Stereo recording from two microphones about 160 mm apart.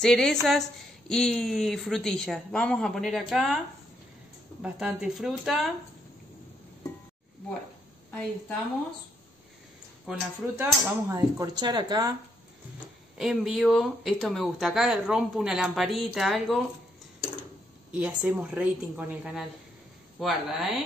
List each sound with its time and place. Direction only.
0.0 s a woman's voice: 5° left (ahead or behind)
4.6 s a woman's voice: 5° right (ahead or behind)
10.0 s speech: 10° right (ahead or behind); by 12.1 s 25° right (ahead or behind)
13.2 s a woman's voice: centre (ahead or behind)
17.9 s a woman's voice: 10° right (ahead or behind)